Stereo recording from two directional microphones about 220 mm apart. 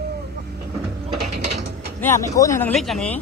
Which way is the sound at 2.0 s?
10° left (ahead or behind).